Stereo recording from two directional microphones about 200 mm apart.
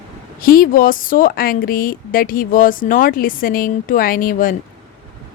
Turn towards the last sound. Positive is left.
turn(degrees=45)  # may be behind; listen again after turning